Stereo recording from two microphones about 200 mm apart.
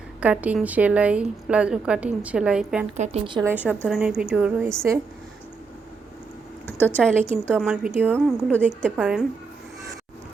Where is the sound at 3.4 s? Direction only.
10° right (ahead or behind).